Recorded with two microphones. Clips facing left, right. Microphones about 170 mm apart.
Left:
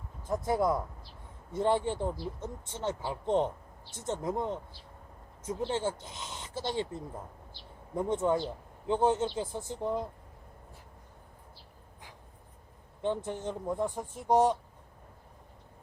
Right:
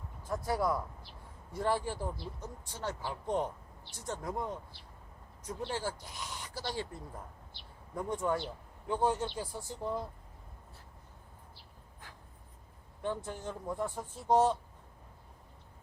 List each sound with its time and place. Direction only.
0.3 s speech: 20° left (ahead or behind)
7.9 s speech: 25° left (ahead or behind)
13.0 s speech: 20° left (ahead or behind)